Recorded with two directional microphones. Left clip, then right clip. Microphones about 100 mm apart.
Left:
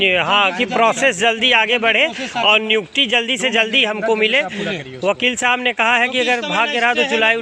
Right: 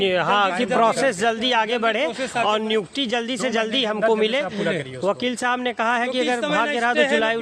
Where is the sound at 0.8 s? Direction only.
Centre (ahead or behind).